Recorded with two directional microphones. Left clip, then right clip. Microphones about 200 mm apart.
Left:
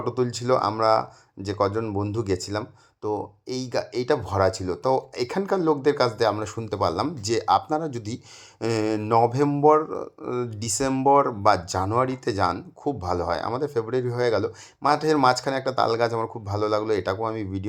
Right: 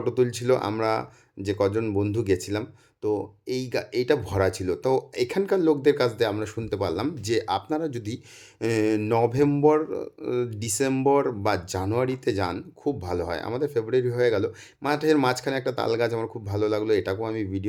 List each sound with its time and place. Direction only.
0.0 s speech: centre (ahead or behind)